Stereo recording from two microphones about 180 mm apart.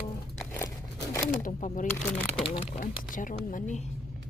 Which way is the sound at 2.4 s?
30° left (ahead or behind).